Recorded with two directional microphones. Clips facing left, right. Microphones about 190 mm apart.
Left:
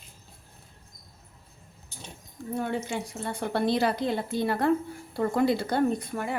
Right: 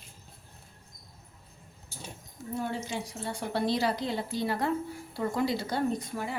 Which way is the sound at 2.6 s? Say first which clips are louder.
Left 3 dB; 55° left (ahead or behind).